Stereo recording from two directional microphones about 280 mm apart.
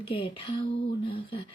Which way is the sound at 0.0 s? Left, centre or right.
Centre.